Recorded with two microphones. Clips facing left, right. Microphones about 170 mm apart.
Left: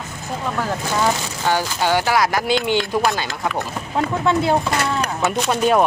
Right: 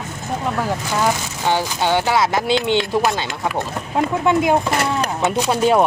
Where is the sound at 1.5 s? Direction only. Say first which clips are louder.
Right 1 dB; 20° right (ahead or behind).